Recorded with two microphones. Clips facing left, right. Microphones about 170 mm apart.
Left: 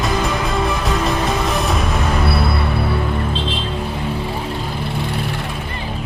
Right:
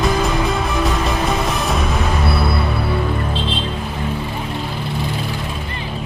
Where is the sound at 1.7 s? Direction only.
Centre (ahead or behind).